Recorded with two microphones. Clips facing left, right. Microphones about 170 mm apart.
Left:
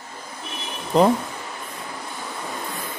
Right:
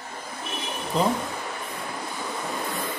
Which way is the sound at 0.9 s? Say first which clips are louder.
Left 7 dB; 70° left (ahead or behind).